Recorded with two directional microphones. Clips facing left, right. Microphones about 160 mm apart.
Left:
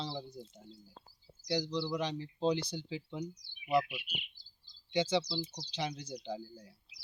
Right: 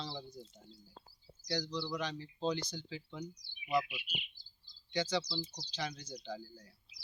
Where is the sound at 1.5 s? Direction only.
20° left (ahead or behind).